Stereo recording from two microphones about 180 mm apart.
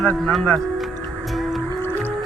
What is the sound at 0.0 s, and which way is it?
Speech, centre (ahead or behind).